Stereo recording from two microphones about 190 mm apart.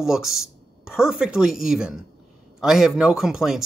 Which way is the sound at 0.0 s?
Centre (ahead or behind).